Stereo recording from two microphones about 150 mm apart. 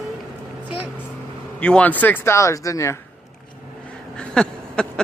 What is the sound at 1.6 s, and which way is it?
Speech, 10° left (ahead or behind).